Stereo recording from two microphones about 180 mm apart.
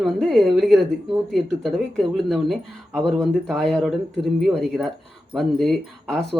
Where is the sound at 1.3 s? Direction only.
Centre (ahead or behind).